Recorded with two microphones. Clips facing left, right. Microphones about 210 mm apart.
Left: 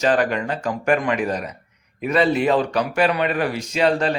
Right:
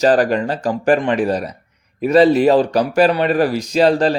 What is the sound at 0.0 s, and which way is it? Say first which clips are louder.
A man's voice: right 5 dB; 35° right (ahead or behind).